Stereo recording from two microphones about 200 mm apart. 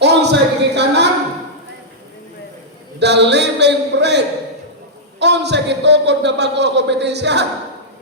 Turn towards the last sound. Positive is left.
turn(degrees=-60)  # may be behind; listen again after turning